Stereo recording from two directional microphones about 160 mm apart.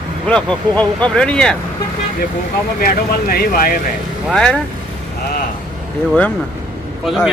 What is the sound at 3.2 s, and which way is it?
Speech, 65° left (ahead or behind).